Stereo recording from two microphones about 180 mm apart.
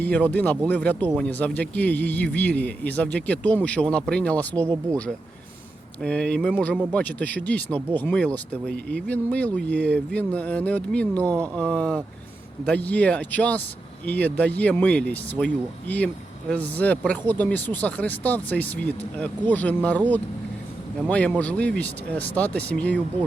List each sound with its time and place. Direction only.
0.0 s speech: 10° left (ahead or behind)
4.6 s speech: 20° right (ahead or behind)
6.0 s speech: 5° left (ahead or behind)
21.1 s speech: 5° left (ahead or behind)